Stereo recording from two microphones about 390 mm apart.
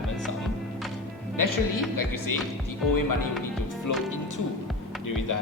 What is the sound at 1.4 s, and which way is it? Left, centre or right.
Speech, left.